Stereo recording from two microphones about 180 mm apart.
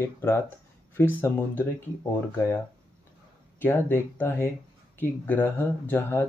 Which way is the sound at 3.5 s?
10° left (ahead or behind).